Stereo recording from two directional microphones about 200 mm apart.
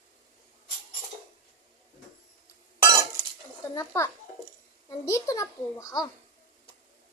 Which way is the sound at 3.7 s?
15° left (ahead or behind).